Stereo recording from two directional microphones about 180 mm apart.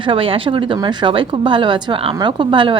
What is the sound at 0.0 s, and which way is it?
A woman's voice, 30° right (ahead or behind).